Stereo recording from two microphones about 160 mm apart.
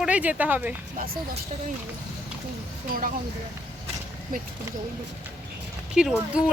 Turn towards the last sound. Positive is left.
turn(degrees=-5)  # may be behind; listen again after turning